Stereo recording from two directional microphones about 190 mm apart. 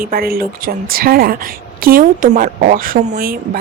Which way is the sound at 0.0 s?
50° right (ahead or behind).